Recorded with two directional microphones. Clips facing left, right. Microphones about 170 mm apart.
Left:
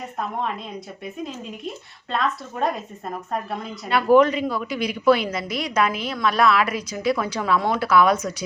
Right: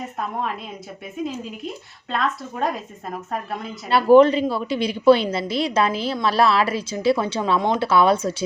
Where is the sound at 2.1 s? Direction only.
Centre (ahead or behind).